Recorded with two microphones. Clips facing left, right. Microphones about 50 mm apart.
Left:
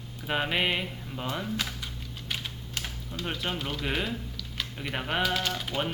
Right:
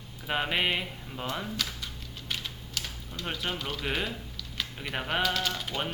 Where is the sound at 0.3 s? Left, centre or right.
Centre.